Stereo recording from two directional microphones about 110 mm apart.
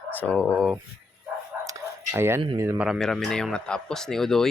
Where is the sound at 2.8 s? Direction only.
Centre (ahead or behind).